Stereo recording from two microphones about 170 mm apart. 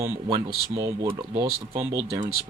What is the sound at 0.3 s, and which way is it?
Speech, 30° right (ahead or behind).